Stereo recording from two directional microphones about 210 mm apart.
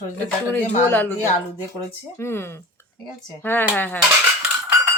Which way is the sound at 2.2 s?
10° left (ahead or behind).